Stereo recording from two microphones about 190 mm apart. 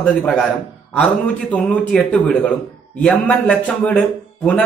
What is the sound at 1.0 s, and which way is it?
A man's voice, 5° left (ahead or behind).